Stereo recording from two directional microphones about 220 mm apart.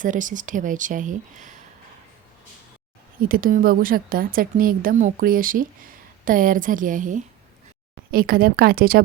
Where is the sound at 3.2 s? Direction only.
40° right (ahead or behind).